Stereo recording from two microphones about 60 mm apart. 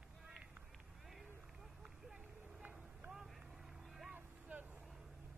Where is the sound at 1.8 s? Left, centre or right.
Centre.